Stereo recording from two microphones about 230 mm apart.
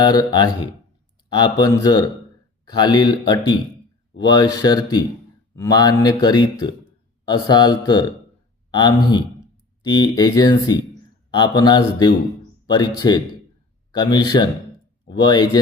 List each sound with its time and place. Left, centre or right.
0.0 s speech: centre